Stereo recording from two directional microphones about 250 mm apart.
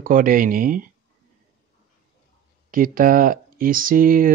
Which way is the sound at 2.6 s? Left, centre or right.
Right.